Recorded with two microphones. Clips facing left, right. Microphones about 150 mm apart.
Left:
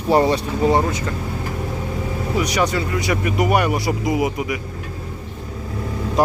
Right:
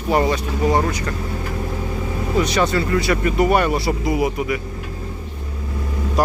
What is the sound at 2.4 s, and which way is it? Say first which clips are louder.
Speech: right 2 dB; 15° left (ahead or behind).